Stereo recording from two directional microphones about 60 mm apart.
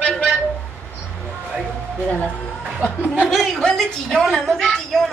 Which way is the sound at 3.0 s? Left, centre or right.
Right.